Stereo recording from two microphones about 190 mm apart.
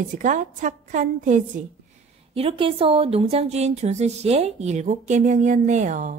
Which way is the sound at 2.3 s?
30° right (ahead or behind).